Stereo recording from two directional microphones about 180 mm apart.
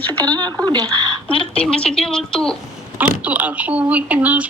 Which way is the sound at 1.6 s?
5° left (ahead or behind).